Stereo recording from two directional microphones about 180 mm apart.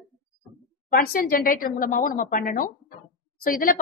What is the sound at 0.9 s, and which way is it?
A woman's voice, 50° left (ahead or behind).